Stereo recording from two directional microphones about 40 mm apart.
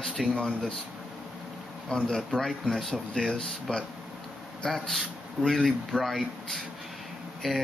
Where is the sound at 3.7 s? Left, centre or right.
Left.